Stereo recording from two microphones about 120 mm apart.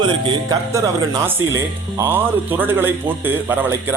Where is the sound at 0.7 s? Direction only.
25° right (ahead or behind).